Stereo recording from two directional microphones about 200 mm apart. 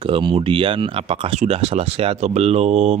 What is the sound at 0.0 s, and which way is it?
Speech, 25° right (ahead or behind).